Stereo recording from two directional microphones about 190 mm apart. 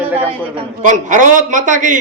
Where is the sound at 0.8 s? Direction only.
45° right (ahead or behind).